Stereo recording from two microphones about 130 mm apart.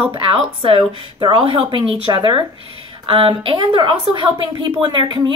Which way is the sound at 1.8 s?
40° left (ahead or behind).